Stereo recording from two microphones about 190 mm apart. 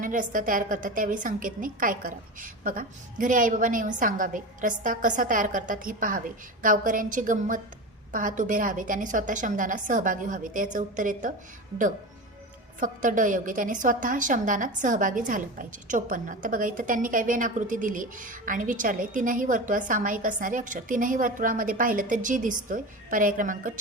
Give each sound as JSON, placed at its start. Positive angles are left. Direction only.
{"t": 0.0, "sound": "a woman's voice", "side_deg": -45}
{"t": 12.8, "sound": "a woman's voice", "side_deg": -45}